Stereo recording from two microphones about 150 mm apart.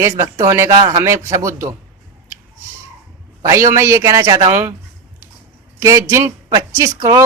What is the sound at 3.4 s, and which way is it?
A man's voice, 20° right (ahead or behind).